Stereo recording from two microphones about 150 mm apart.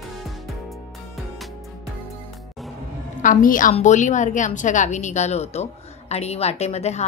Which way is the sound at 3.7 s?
50° left (ahead or behind).